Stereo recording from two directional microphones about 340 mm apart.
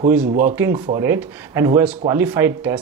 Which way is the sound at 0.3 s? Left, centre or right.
Right.